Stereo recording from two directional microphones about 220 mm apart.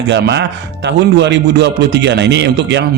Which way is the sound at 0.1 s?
50° right (ahead or behind).